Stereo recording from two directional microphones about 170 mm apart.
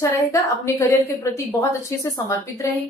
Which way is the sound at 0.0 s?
20° left (ahead or behind).